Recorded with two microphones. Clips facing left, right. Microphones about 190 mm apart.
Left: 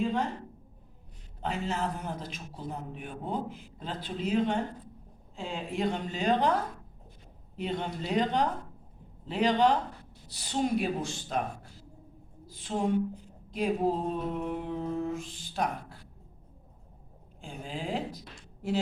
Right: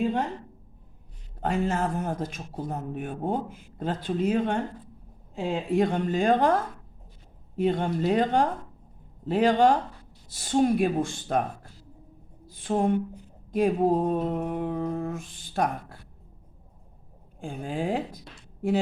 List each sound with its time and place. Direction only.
1.4 s a man's voice: 50° right (ahead or behind)
5.7 s a man's voice: 50° right (ahead or behind)
12.5 s a sound: 55° right (ahead or behind)
13.5 s a man's voice: 50° right (ahead or behind)
17.4 s a man's voice: 55° right (ahead or behind)